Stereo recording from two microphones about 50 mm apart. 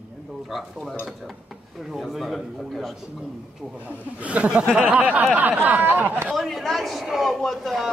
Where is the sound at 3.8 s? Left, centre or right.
Right.